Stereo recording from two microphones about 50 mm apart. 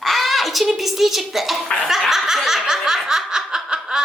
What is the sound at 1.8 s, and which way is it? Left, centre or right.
Snicker, centre.